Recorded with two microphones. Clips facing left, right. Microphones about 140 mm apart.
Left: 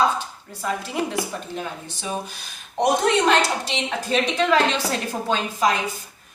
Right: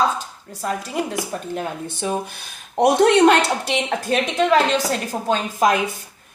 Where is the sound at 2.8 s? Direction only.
60° right (ahead or behind).